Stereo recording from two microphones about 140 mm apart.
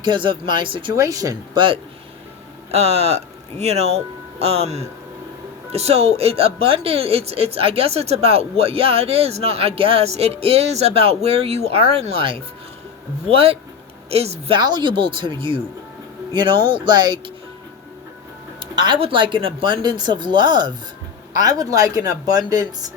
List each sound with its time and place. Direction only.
0.0 s speech: 35° right (ahead or behind)
0.9 s speech: 25° right (ahead or behind)
2.7 s speech: 45° right (ahead or behind)
14.6 s speech: 30° right (ahead or behind)
18.8 s speech: 35° right (ahead or behind)